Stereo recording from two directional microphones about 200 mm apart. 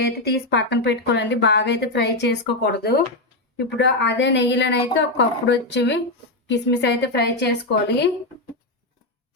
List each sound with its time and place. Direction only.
0.0 s speech: 55° left (ahead or behind)